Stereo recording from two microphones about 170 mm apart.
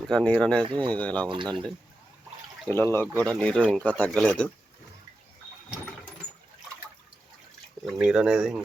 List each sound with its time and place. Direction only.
0.1 s speech: 5° left (ahead or behind)
1.3 s speech: 30° right (ahead or behind)
2.6 s speech: 15° left (ahead or behind)
7.9 s speech: 5° right (ahead or behind)